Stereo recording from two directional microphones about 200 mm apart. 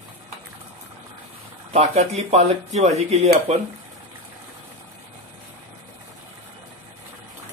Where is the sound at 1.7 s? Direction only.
35° right (ahead or behind).